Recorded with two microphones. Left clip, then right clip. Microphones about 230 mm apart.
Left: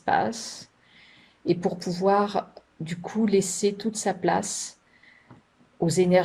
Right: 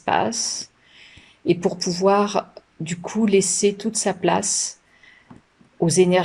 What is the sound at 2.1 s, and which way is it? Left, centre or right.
Speech, right.